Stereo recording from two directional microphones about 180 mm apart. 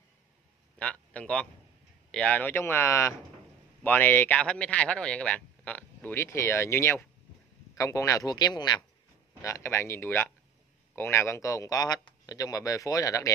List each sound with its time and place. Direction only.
0.7 s a man's voice: 5° left (ahead or behind)